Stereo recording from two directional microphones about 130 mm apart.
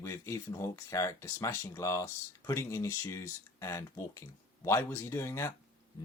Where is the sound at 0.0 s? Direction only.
20° left (ahead or behind).